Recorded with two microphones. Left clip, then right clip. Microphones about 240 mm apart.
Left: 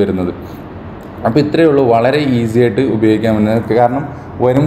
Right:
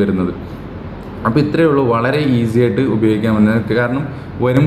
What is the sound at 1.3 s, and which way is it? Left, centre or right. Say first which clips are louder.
Speech: left 3 dB; centre.